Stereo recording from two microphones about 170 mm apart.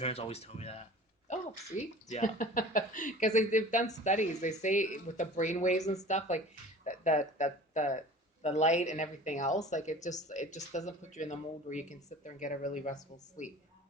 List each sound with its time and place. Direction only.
0.0 s speech: 35° left (ahead or behind)